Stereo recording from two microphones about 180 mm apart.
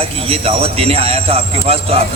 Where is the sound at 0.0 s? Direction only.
30° right (ahead or behind).